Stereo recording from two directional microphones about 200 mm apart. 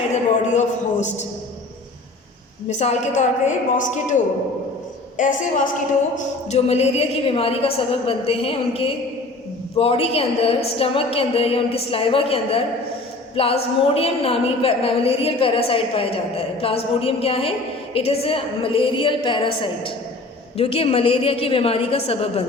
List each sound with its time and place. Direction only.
0.5 s a woman's voice: 35° left (ahead or behind)
2.6 s a woman's voice: 35° left (ahead or behind)